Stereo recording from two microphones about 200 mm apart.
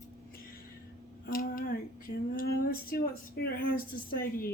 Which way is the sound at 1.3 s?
45° left (ahead or behind).